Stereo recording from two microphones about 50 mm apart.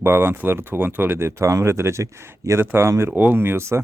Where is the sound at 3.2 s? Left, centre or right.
Right.